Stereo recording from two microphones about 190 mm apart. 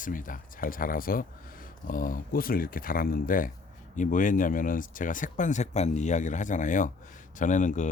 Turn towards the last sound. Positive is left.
turn(degrees=40)  # may be behind; listen again after turning